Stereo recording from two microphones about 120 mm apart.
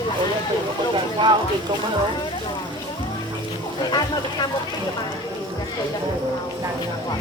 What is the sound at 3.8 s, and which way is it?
Speech, 35° left (ahead or behind).